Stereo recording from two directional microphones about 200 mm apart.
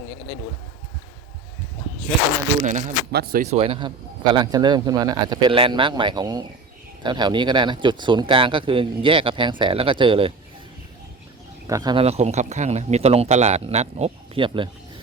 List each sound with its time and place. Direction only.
2.6 s speech: 40° right (ahead or behind)
3.1 s speech: 55° right (ahead or behind)
3.4 s speech: 30° right (ahead or behind)
11.7 s speech: 20° right (ahead or behind)
12.0 s speech: 30° right (ahead or behind)